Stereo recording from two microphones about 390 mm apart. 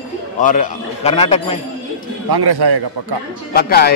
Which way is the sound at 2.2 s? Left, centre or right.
Right.